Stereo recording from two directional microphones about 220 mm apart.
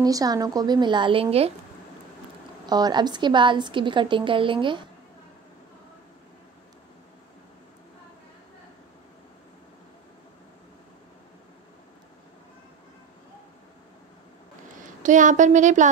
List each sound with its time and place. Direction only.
0.0 s a woman's voice: 15° right (ahead or behind)
2.6 s a woman's voice: 20° right (ahead or behind)
15.0 s speech: 35° right (ahead or behind)